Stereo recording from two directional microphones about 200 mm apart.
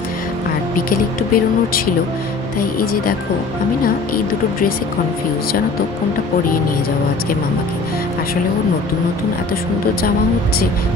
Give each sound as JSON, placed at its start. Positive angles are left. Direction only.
{"t": 0.7, "sound": "speech", "side_deg": 45}